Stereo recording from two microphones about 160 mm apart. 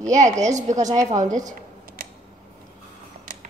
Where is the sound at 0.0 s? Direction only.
50° right (ahead or behind).